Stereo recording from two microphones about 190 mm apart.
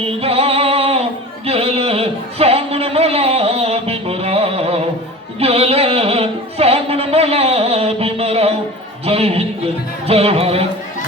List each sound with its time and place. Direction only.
0.0 s music: 30° right (ahead or behind)
1.5 s a sound: 30° right (ahead or behind)
10.1 s music: 30° right (ahead or behind)